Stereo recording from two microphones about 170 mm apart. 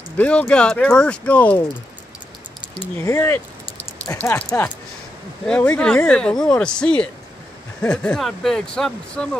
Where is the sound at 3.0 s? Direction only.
15° left (ahead or behind).